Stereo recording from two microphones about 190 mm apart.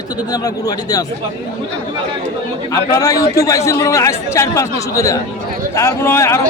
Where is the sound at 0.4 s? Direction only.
20° left (ahead or behind).